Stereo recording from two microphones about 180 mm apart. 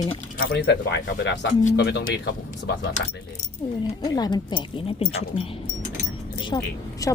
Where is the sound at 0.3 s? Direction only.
70° left (ahead or behind).